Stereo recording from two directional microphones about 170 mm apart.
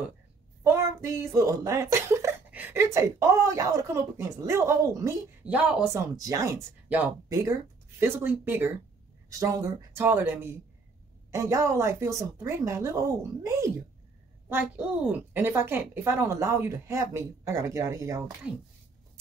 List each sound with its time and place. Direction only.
0.7 s speech: 15° right (ahead or behind)
6.1 s speech: 20° right (ahead or behind)